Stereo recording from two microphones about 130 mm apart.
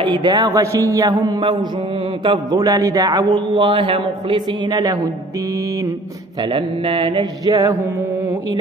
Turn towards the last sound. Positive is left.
turn(degrees=-30)  # may be behind; listen again after turning